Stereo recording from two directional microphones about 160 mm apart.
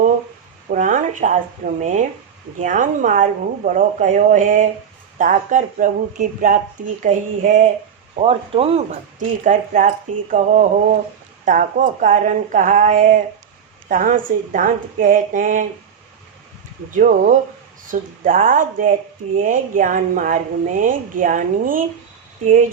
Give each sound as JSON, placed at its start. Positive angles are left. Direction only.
{"t": 0.7, "sound": "speech", "side_deg": -55}
{"t": 8.2, "sound": "speech", "side_deg": -35}
{"t": 16.9, "sound": "speech", "side_deg": -55}